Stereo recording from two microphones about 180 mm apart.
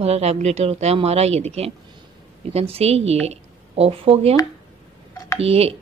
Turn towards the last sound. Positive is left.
turn(degrees=-35)  # may be behind; listen again after turning